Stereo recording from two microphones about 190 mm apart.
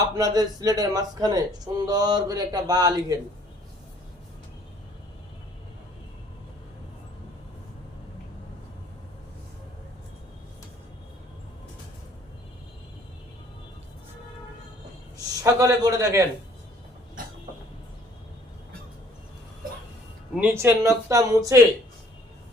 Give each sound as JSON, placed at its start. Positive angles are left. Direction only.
{"t": 0.0, "sound": "speech", "side_deg": -20}
{"t": 15.4, "sound": "speech", "side_deg": -15}
{"t": 20.3, "sound": "speech", "side_deg": -10}